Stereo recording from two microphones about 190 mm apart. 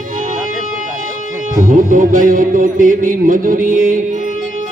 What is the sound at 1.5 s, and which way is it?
Speech, 45° right (ahead or behind).